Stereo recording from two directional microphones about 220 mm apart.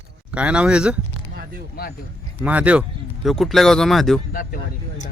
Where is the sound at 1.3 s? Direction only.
45° right (ahead or behind).